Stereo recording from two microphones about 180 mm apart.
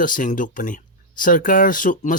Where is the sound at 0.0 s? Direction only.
50° left (ahead or behind).